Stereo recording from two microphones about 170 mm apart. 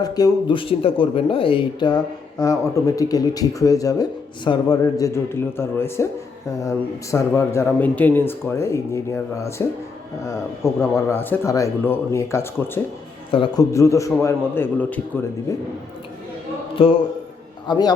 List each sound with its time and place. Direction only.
0.0 s speech: 20° left (ahead or behind)
13.3 s speech: 25° left (ahead or behind)
16.7 s speech: 30° left (ahead or behind)